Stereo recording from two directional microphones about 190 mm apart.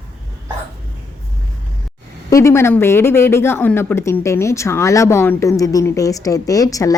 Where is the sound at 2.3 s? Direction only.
15° left (ahead or behind).